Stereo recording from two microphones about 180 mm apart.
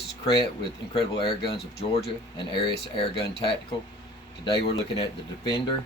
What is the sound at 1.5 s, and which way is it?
Speech, 35° left (ahead or behind).